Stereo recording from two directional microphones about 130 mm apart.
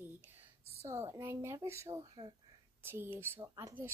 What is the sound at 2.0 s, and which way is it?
Speech, 35° right (ahead or behind).